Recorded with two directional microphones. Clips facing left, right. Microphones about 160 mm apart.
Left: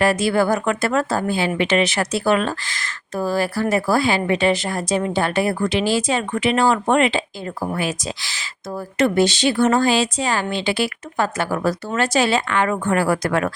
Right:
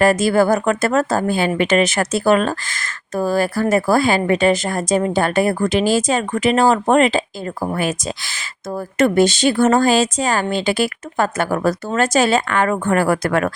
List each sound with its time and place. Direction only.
0.0 s speech: 45° right (ahead or behind)